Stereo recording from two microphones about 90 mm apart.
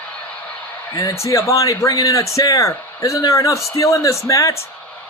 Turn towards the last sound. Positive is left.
turn(degrees=35)  # may be behind; listen again after turning